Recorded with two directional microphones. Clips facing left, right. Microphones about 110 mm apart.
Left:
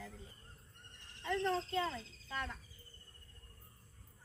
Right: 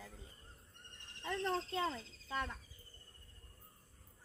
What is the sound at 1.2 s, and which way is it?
A woman's voice, 10° right (ahead or behind).